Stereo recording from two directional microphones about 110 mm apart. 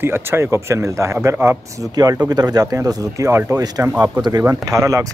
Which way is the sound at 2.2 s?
35° right (ahead or behind).